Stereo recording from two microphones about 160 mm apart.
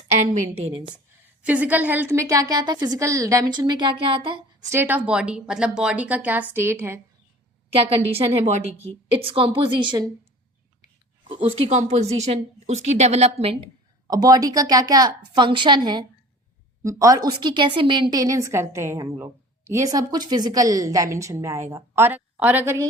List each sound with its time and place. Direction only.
0.3 s a woman's voice: 40° right (ahead or behind)
1.4 s a woman's voice: 10° right (ahead or behind); by 4.4 s 35° right (ahead or behind)
4.6 s speech: 15° right (ahead or behind)
7.7 s a woman's voice: 35° right (ahead or behind)
9.0 s a woman's voice: 35° right (ahead or behind)
11.3 s a woman's voice: 40° right (ahead or behind)
14.1 s a woman's voice: 25° right (ahead or behind)